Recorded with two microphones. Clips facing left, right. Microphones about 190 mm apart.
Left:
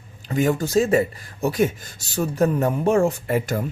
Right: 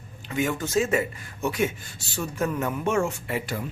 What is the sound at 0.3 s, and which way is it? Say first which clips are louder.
Speech: left 6 dB; 35° left (ahead or behind).